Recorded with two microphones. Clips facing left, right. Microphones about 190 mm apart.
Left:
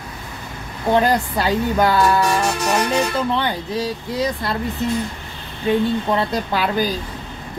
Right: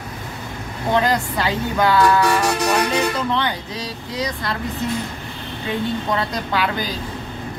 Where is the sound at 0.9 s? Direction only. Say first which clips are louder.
Left 2 dB; 35° left (ahead or behind).